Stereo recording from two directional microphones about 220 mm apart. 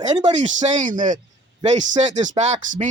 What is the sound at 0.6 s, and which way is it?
Speech, 35° right (ahead or behind).